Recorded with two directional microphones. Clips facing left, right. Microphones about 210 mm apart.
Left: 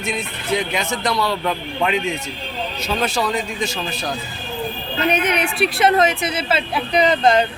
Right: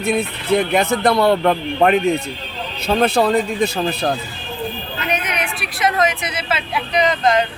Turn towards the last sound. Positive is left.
turn(degrees=30)  # may be behind; listen again after turning